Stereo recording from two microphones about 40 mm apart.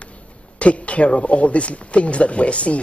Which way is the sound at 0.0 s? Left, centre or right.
Left.